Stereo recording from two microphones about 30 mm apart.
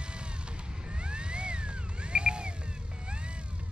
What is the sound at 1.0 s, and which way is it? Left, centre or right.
Vehicle, right.